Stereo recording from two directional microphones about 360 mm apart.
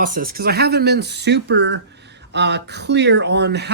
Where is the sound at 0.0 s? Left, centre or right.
Right.